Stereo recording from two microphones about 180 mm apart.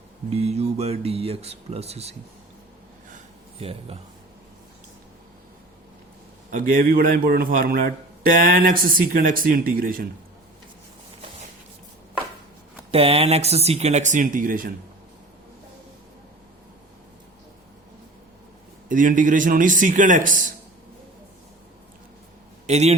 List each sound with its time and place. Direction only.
0.3 s speech: 35° right (ahead or behind)
3.6 s speech: 35° right (ahead or behind)
6.5 s speech: 50° right (ahead or behind)
12.9 s speech: 35° right (ahead or behind); by 14.7 s 50° right (ahead or behind)
18.9 s speech: 50° right (ahead or behind)
22.6 s a man's voice: 40° right (ahead or behind)